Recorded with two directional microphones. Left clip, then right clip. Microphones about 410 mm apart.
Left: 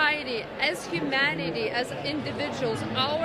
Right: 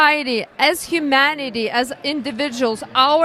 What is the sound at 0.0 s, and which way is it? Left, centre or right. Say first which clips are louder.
A woman's voice: right 10 dB; right.